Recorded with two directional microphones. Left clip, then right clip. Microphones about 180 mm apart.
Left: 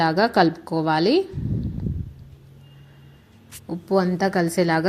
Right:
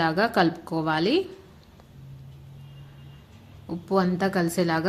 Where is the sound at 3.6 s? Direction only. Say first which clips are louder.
Left 3 dB; 15° left (ahead or behind).